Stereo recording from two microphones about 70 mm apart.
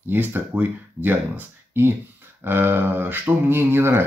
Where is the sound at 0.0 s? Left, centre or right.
Right.